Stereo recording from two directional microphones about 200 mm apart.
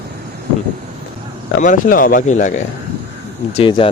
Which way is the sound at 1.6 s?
40° left (ahead or behind).